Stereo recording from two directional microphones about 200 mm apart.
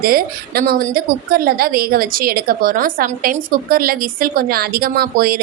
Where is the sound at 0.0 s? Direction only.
45° right (ahead or behind).